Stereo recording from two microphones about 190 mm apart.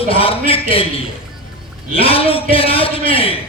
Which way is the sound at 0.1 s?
30° left (ahead or behind).